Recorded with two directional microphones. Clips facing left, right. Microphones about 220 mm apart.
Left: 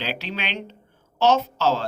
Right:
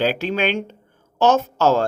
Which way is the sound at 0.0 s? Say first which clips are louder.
Right 10 dB; 50° right (ahead or behind).